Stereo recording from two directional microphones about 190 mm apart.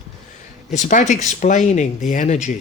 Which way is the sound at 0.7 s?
40° left (ahead or behind).